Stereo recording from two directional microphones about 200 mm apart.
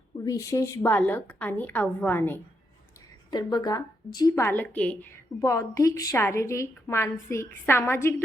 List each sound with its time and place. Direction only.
0.3 s a woman's voice: 15° left (ahead or behind)